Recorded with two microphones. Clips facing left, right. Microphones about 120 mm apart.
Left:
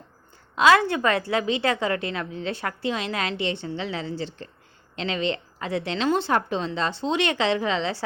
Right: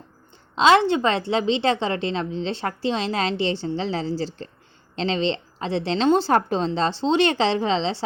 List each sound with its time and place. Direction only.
0.5 s a woman's voice: 25° right (ahead or behind)